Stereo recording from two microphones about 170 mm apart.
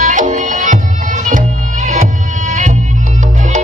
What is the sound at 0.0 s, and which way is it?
Music, 50° right (ahead or behind).